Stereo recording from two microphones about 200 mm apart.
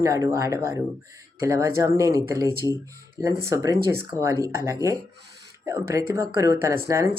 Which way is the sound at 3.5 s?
15° right (ahead or behind).